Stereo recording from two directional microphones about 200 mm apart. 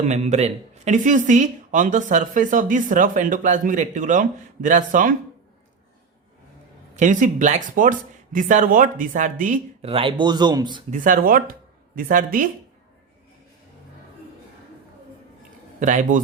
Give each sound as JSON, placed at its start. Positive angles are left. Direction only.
{"t": 0.0, "sound": "speech", "side_deg": -35}
{"t": 6.9, "sound": "speech", "side_deg": -40}
{"t": 9.9, "sound": "speech", "side_deg": -25}
{"t": 10.9, "sound": "speech", "side_deg": -40}
{"t": 15.8, "sound": "speech", "side_deg": -40}